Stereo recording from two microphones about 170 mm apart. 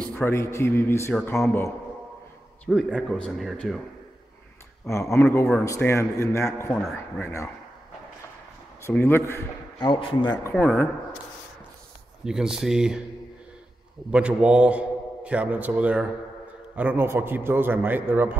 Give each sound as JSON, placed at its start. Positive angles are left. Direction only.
{"t": 0.0, "sound": "a man's voice", "side_deg": 10}
{"t": 2.6, "sound": "a man's voice", "side_deg": 0}
{"t": 5.1, "sound": "a man's voice", "side_deg": 15}
{"t": 8.8, "sound": "a man's voice", "side_deg": 15}
{"t": 9.8, "sound": "a man's voice", "side_deg": 30}
{"t": 10.5, "sound": "a man's voice", "side_deg": 5}
{"t": 12.3, "sound": "a man's voice", "side_deg": -5}
{"t": 14.1, "sound": "a man's voice", "side_deg": -5}